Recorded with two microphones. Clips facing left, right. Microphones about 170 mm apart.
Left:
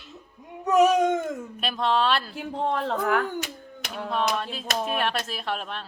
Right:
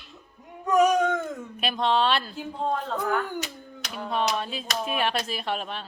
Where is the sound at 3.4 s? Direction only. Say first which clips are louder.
Left 1 dB; 55° left (ahead or behind).